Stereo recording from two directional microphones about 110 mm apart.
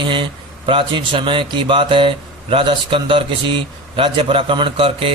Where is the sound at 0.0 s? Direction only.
50° right (ahead or behind).